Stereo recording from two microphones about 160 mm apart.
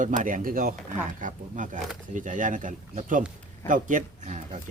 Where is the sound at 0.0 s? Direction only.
55° right (ahead or behind).